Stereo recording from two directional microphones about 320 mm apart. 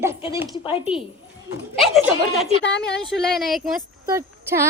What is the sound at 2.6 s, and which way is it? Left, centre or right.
Speech, left.